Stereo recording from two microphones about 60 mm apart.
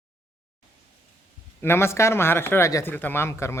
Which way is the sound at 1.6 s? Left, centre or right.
Left.